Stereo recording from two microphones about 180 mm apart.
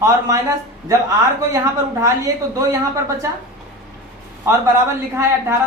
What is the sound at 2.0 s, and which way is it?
Speech, 20° right (ahead or behind).